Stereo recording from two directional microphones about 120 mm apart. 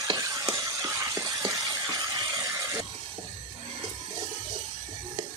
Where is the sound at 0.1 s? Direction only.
30° right (ahead or behind).